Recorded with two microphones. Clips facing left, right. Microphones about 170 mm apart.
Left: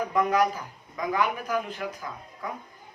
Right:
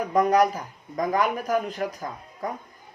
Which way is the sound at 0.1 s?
40° right (ahead or behind).